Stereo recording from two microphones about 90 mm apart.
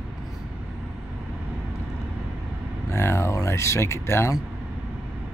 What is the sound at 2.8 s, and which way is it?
Speech, 30° left (ahead or behind).